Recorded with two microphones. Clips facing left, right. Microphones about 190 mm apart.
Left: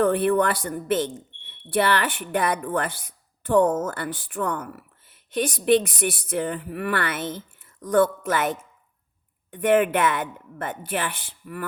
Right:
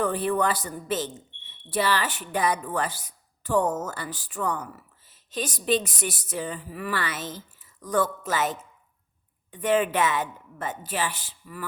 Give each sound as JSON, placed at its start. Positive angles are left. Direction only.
{"t": 0.0, "sound": "speech", "side_deg": 55}